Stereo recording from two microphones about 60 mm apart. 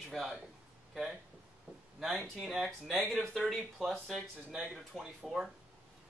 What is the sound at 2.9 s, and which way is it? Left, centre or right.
Speech, right.